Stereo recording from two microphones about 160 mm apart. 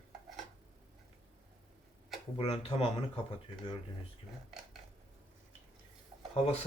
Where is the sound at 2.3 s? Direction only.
35° left (ahead or behind).